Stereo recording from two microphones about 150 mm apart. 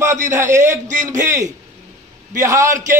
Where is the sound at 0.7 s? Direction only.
55° right (ahead or behind).